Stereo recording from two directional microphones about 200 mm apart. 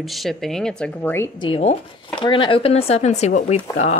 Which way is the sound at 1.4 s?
30° left (ahead or behind).